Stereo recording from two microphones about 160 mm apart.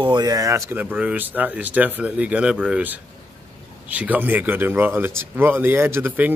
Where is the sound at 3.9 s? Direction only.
10° right (ahead or behind).